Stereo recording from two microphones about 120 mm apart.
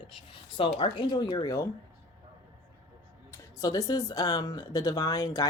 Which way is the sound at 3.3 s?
30° left (ahead or behind).